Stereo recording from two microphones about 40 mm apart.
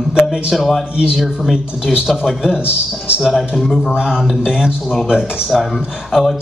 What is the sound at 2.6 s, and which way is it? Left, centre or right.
Speech, left.